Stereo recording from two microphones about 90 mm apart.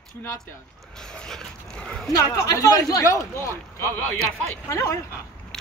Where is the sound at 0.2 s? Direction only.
30° left (ahead or behind).